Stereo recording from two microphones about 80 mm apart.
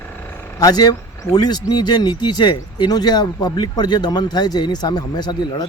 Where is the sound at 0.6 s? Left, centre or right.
Left.